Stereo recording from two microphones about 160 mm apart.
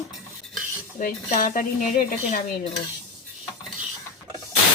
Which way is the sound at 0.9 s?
55° left (ahead or behind).